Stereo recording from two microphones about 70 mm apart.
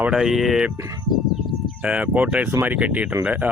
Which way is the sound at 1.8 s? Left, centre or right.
Centre.